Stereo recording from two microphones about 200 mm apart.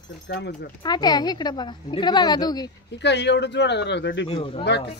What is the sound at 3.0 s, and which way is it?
Speech, 60° left (ahead or behind).